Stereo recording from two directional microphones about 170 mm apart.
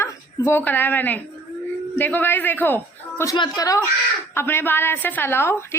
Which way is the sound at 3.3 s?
25° left (ahead or behind).